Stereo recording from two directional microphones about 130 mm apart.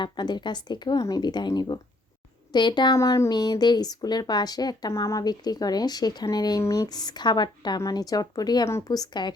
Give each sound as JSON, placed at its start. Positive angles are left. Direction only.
{"t": 0.0, "sound": "speech", "side_deg": 35}